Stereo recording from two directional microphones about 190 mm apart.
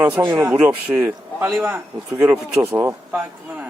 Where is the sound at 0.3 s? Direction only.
10° right (ahead or behind).